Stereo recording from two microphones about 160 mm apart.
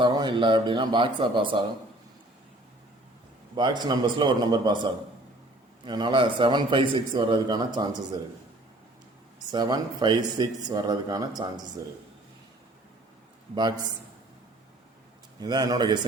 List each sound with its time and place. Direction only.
0.0 s speech: 30° right (ahead or behind)
3.5 s a man's voice: 30° right (ahead or behind)
9.5 s a man's voice: 25° right (ahead or behind)
13.6 s a man's voice: 25° right (ahead or behind)
15.4 s a man's voice: 25° right (ahead or behind)